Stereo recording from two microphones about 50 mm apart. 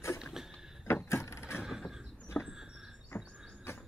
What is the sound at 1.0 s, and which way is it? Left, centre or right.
Vehicle, left.